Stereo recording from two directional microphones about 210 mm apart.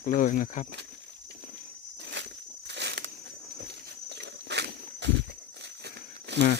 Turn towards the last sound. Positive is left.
turn(degrees=-55)  # may be behind; listen again after turning